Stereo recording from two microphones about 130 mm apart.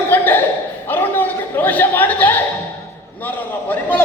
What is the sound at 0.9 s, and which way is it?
Chatter, 15° left (ahead or behind).